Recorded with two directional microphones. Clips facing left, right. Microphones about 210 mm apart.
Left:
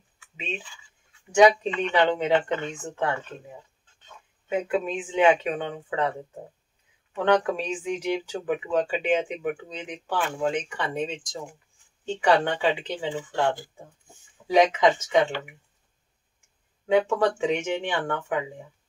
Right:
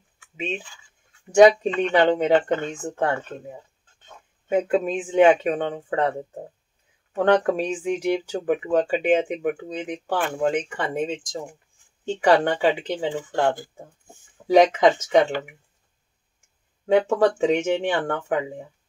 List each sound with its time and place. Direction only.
0.4 s speech: 50° right (ahead or behind)
4.5 s speech: 45° right (ahead or behind)
12.2 s speech: 45° right (ahead or behind)
16.8 s speech: 40° right (ahead or behind)